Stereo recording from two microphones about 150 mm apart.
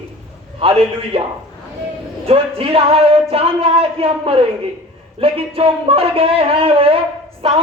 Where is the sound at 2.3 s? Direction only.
40° right (ahead or behind).